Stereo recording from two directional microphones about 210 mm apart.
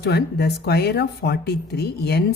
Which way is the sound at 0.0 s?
50° left (ahead or behind).